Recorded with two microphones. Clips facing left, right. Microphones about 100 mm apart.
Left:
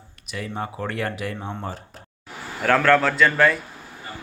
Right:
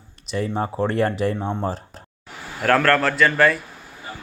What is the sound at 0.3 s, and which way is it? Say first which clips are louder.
Speech: right 6 dB; 30° right (ahead or behind).